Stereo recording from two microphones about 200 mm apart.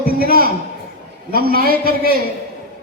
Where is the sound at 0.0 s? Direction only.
50° right (ahead or behind).